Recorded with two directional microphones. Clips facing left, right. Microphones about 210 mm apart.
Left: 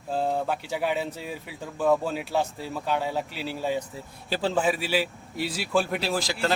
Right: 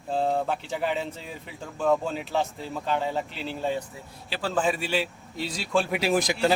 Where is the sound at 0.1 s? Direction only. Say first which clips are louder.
Right 1 dB; centre (ahead or behind).